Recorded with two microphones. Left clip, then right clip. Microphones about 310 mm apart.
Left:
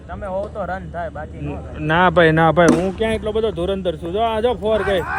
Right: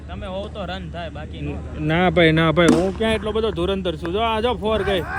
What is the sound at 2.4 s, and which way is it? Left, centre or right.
A man's voice, centre.